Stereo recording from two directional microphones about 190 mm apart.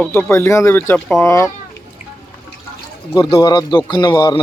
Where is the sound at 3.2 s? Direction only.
20° left (ahead or behind).